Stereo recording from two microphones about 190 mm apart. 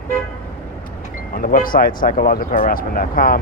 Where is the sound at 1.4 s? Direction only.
50° left (ahead or behind).